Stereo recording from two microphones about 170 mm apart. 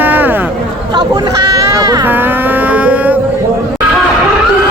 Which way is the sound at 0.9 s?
25° right (ahead or behind).